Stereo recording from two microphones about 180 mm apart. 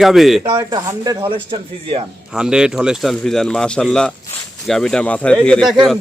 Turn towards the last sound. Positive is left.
turn(degrees=5)  # may be behind; listen again after turning